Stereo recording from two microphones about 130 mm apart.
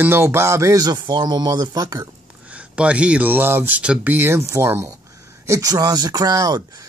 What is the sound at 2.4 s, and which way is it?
Speech, 10° right (ahead or behind).